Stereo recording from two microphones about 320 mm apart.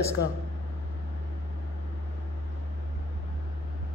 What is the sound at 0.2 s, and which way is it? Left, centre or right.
Speech, left.